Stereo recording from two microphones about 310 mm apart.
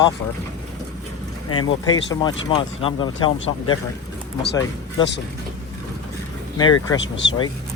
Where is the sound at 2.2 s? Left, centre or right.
Centre.